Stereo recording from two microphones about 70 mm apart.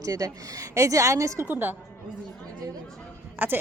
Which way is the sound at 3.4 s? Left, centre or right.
Right.